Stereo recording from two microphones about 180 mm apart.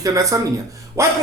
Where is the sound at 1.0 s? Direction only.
15° right (ahead or behind).